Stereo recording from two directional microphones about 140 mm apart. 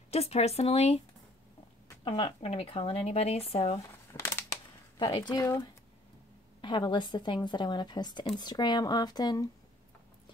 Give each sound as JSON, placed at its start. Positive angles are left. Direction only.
{"t": 0.1, "sound": "speech", "side_deg": 45}
{"t": 2.0, "sound": "speech", "side_deg": 40}
{"t": 4.1, "sound": "a sound", "side_deg": 25}
{"t": 4.9, "sound": "speech", "side_deg": 30}